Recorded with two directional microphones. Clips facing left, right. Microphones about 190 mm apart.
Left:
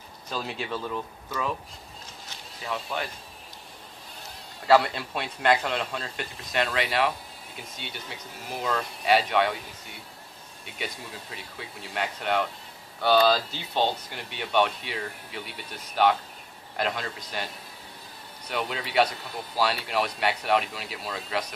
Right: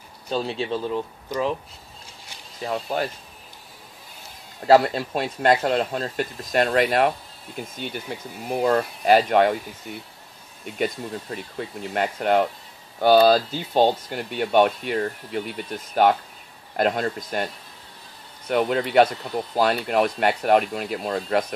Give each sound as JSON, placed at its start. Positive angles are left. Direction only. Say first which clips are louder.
{"t": 0.3, "sound": "speech", "louder": "right 7 dB", "side_deg": -30}
{"t": 2.6, "sound": "speech", "louder": "right 7 dB", "side_deg": -40}
{"t": 4.6, "sound": "a man's voice", "louder": "right 5 dB", "side_deg": -40}
{"t": 10.6, "sound": "a man's voice", "louder": "right 11 dB", "side_deg": -45}
{"t": 18.5, "sound": "a man's voice", "louder": "right 10 dB", "side_deg": -50}